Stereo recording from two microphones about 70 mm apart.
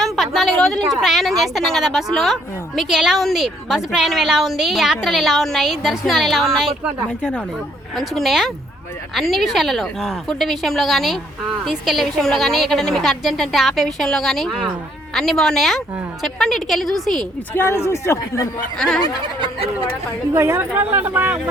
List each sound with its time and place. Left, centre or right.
0.0 s a sound: centre
1.0 s speech: centre
7.2 s speech: centre
7.9 s speech: centre
17.5 s speech: left
20.3 s a woman's voice: right